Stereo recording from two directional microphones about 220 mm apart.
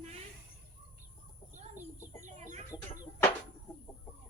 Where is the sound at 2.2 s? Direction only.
35° right (ahead or behind).